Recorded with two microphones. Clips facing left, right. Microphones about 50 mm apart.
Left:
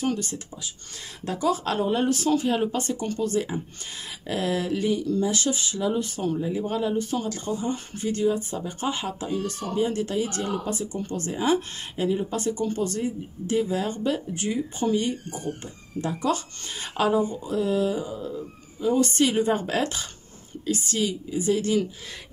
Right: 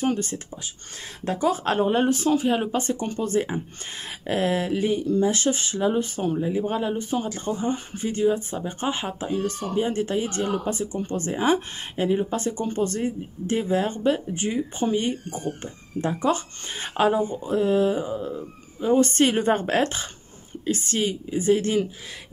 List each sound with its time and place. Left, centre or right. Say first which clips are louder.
0.0 s speech: right 2 dB; right